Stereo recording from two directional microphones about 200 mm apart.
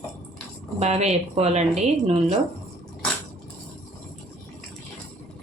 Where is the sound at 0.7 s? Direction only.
30° right (ahead or behind).